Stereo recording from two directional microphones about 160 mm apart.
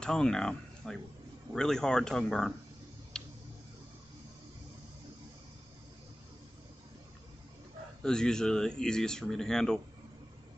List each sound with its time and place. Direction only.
0.0 s speech: 5° left (ahead or behind)
3.1 s tick-tock: 5° left (ahead or behind)
8.0 s speech: 5° left (ahead or behind)